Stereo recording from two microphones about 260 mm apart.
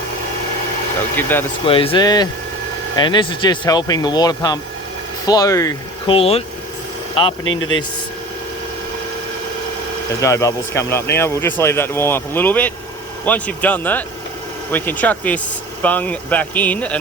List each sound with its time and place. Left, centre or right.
1.1 s speech: centre
1.6 s speech: left
7.4 s speech: left
10.2 s a man's voice: centre